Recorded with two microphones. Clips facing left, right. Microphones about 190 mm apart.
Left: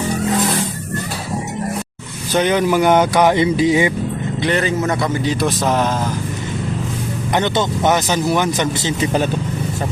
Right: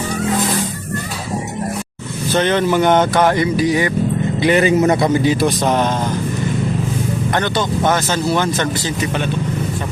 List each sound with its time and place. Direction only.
2.3 s speech: 10° left (ahead or behind)
3.3 s speech: 20° left (ahead or behind)
4.4 s a man's voice: 10° right (ahead or behind)
5.2 s speech: 5° right (ahead or behind)
7.3 s speech: 20° left (ahead or behind)